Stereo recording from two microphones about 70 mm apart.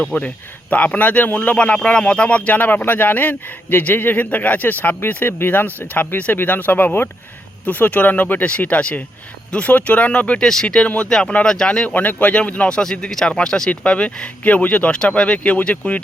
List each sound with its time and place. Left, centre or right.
0.0 s speech: centre
11.9 s speech: left